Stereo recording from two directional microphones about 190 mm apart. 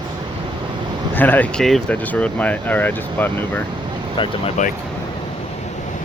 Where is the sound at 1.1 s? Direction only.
10° left (ahead or behind).